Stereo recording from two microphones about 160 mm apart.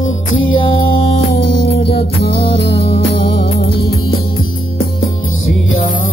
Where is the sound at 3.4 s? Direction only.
75° left (ahead or behind).